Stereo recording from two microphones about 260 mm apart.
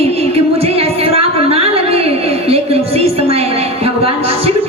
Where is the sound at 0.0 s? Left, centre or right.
Right.